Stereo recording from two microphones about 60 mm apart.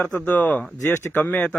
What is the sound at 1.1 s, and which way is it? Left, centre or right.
Speech, left.